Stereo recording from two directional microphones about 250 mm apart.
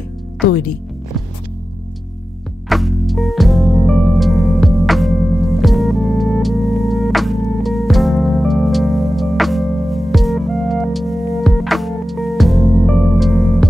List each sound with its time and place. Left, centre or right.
0.5 s speech: left
2.7 s music: centre